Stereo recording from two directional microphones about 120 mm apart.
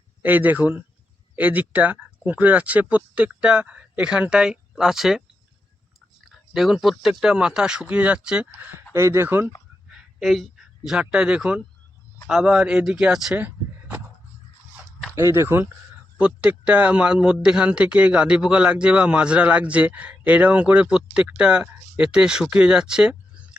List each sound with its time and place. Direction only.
0.2 s speech: 15° right (ahead or behind)
6.2 s a sound: centre (ahead or behind)
7.0 s speech: 5° right (ahead or behind)
9.9 s speech: centre (ahead or behind)
15.1 s speech: 25° right (ahead or behind); by 23.6 s 5° right (ahead or behind)